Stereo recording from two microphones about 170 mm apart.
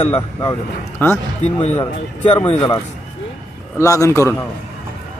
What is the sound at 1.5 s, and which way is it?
Speech, 40° left (ahead or behind).